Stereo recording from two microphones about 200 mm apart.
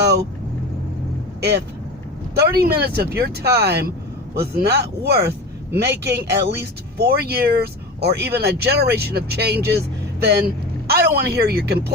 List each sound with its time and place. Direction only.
0.0 s vehicle: 55° right (ahead or behind)
1.4 s a man's voice: 55° right (ahead or behind)